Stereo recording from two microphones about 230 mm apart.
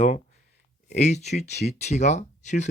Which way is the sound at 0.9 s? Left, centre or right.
Left.